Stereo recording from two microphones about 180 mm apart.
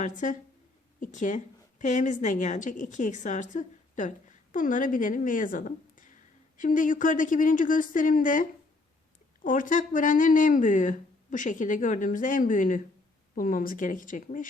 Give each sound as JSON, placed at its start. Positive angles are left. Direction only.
{"t": 0.0, "sound": "a woman's voice", "side_deg": 45}